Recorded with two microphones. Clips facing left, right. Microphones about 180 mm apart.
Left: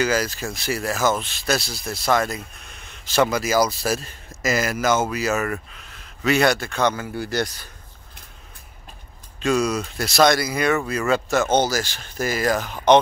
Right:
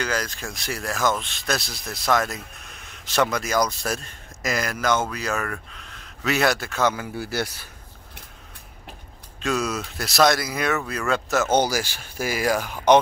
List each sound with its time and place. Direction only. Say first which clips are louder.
0.0 s speech: left 5 dB; 5° left (ahead or behind)
9.4 s speech: left 4 dB; centre (ahead or behind)